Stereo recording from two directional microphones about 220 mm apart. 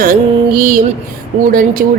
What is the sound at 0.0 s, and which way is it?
Music, 40° right (ahead or behind).